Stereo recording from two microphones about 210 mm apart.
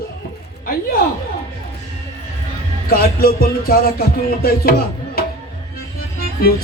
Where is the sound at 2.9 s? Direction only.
45° left (ahead or behind).